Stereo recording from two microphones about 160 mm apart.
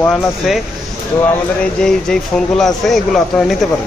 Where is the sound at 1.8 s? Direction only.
5° left (ahead or behind).